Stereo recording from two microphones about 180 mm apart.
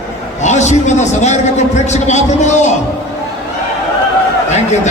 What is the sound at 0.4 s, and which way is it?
A man's voice, 40° left (ahead or behind).